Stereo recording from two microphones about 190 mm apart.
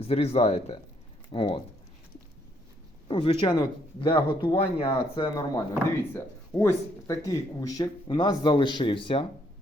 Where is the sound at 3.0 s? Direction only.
30° left (ahead or behind).